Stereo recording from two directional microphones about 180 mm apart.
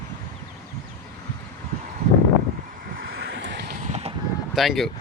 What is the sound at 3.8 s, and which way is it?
Vehicle, 40° right (ahead or behind).